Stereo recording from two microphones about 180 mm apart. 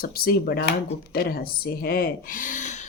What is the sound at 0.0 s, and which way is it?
Speech, 55° left (ahead or behind).